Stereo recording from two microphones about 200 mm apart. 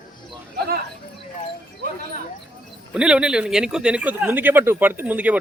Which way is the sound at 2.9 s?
5° right (ahead or behind).